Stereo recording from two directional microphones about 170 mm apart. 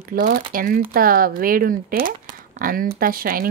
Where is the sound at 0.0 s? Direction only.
55° right (ahead or behind).